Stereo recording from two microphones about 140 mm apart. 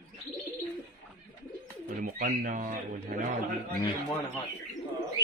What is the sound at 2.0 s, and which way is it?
Speech, 65° right (ahead or behind).